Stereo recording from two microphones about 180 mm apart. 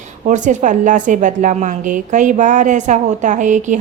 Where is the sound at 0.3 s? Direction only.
45° right (ahead or behind).